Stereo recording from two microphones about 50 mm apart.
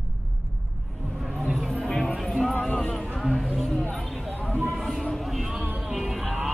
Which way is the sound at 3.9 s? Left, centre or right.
Centre.